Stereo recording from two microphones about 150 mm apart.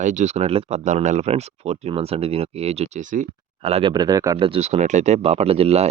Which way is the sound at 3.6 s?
40° right (ahead or behind).